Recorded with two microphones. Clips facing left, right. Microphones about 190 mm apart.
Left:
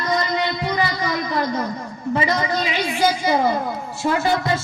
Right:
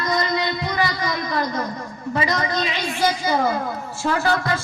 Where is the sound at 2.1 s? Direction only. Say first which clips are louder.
Left 2 dB; 25° left (ahead or behind).